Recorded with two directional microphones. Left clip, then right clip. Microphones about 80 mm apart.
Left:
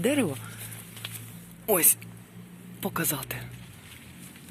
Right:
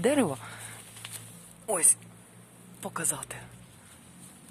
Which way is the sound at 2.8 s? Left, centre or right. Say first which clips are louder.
Left 4 dB; left.